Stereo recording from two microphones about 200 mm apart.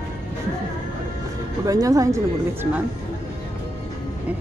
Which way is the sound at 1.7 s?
15° right (ahead or behind).